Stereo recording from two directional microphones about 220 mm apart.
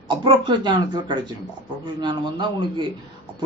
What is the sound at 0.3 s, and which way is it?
Speech, 20° right (ahead or behind).